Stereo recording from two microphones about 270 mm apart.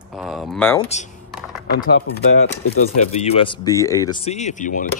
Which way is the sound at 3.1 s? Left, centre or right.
Left.